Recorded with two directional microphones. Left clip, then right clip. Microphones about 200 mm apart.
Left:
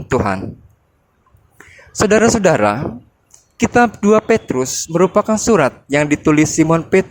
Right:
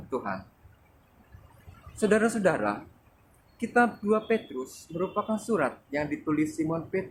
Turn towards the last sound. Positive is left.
turn(degrees=50)  # may be behind; listen again after turning